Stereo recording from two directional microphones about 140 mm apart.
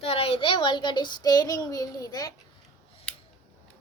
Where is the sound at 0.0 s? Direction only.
40° left (ahead or behind); by 2.3 s 25° left (ahead or behind).